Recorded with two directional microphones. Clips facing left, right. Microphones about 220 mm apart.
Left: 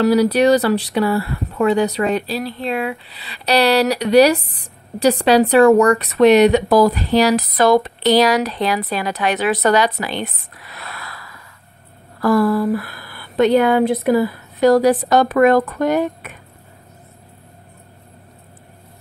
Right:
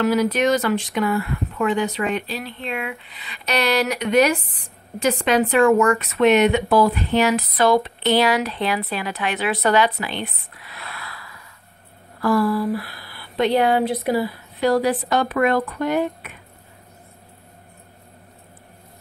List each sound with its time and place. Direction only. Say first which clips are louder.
0.0 s speech: left 5 dB; 35° left (ahead or behind)